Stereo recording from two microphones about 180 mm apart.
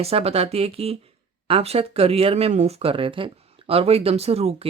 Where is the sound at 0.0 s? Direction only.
35° right (ahead or behind).